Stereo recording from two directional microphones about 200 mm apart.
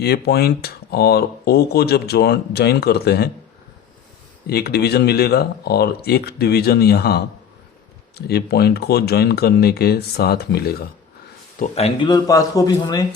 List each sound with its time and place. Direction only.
0.0 s speech: 55° left (ahead or behind)
4.4 s speech: 50° left (ahead or behind)
11.6 s speech: 30° left (ahead or behind)